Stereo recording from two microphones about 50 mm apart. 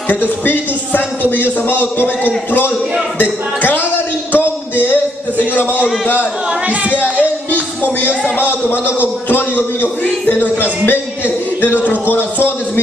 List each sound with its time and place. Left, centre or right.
1.7 s speech: left
3.2 s a man's voice: left
8.4 s a man's voice: left